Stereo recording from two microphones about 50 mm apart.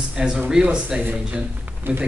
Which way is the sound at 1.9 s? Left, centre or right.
Right.